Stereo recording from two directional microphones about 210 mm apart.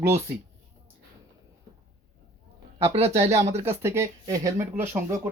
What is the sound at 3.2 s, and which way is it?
Speech, 15° right (ahead or behind).